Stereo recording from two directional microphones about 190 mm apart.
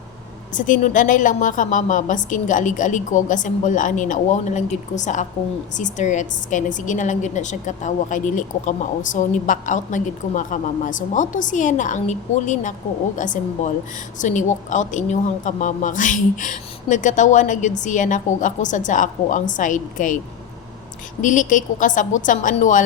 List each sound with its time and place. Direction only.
0.5 s a woman's voice: 45° left (ahead or behind)
21.2 s a woman's voice: 40° left (ahead or behind)